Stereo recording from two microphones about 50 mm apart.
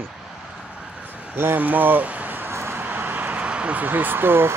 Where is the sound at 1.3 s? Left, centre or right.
Right.